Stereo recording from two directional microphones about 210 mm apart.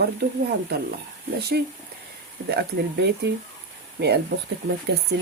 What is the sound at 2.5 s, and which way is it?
A woman's voice, 50° right (ahead or behind).